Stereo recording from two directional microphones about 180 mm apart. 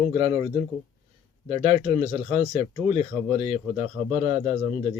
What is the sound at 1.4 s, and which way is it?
Speech, 35° right (ahead or behind).